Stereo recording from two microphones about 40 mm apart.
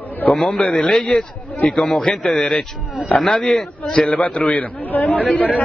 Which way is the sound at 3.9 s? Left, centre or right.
Left.